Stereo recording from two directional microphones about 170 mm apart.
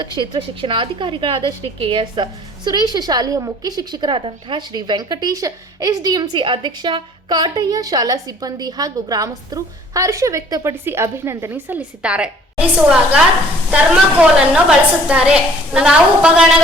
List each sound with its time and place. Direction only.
0.0 s a woman's voice: 30° right (ahead or behind); by 16.6 s 5° right (ahead or behind)